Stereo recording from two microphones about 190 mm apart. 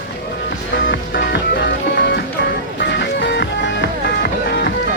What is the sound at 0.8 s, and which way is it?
Music, 60° left (ahead or behind).